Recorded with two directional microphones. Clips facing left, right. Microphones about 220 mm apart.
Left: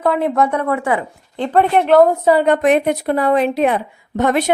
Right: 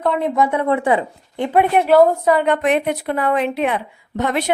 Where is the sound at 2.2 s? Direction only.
35° left (ahead or behind).